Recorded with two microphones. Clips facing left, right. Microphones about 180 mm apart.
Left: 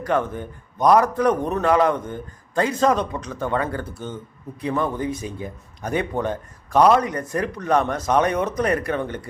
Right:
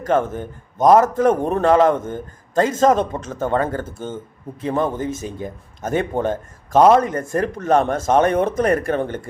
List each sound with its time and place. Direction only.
0.0 s a man's voice: 45° right (ahead or behind)